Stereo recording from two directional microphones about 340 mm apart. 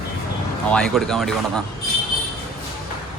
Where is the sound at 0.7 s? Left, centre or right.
Centre.